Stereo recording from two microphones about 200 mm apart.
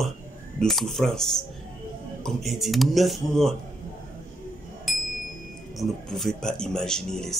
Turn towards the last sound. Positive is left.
turn(degrees=5)  # may be behind; listen again after turning